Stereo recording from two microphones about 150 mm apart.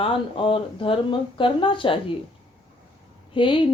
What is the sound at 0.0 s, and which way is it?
A woman's voice, 35° left (ahead or behind).